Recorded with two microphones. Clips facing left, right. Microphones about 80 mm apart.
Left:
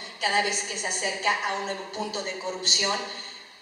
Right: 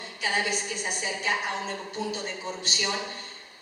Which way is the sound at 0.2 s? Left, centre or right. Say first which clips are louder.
Left 3 dB; left.